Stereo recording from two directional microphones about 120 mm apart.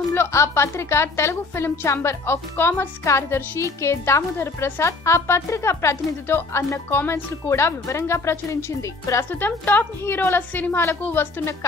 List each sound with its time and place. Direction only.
0.1 s a woman's voice: 20° left (ahead or behind)